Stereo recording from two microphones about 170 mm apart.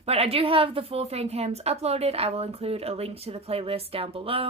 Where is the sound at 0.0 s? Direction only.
35° right (ahead or behind).